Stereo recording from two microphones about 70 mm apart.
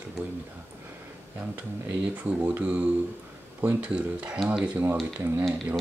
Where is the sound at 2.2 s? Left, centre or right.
Centre.